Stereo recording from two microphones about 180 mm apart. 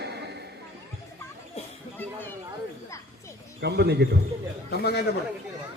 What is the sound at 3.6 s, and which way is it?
Speech, 65° right (ahead or behind).